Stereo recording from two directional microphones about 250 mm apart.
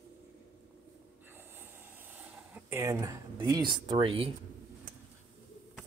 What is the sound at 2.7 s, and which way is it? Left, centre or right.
Speech, centre.